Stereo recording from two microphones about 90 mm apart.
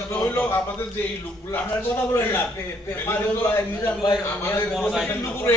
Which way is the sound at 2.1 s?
25° left (ahead or behind).